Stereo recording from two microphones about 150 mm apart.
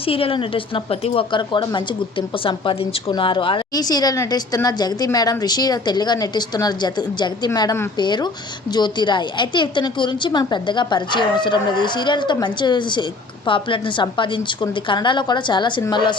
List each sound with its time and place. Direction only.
0.0 s a woman's voice: 40° left (ahead or behind)